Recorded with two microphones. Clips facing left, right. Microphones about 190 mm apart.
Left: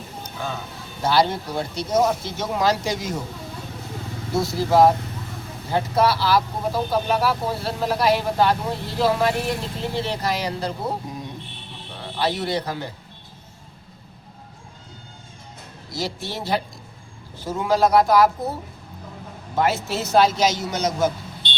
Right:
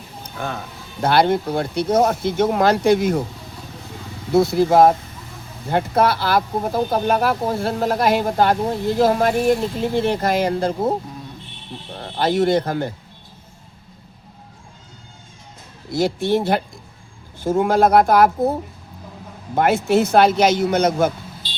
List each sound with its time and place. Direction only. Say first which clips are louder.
1.0 s speech: right 4 dB; 55° right (ahead or behind)
4.4 s speech: right 4 dB; 55° right (ahead or behind)
12.1 s speech: right 7 dB; 50° right (ahead or behind)
15.9 s speech: right 11 dB; 55° right (ahead or behind)
19.5 s speech: right 6 dB; 55° right (ahead or behind)